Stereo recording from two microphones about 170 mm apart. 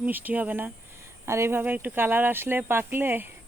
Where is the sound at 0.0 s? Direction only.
10° right (ahead or behind).